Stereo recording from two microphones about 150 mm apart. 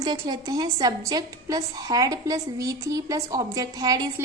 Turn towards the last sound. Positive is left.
turn(degrees=-25)  # may be behind; listen again after turning